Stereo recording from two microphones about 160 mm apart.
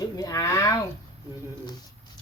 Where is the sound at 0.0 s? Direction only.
20° left (ahead or behind).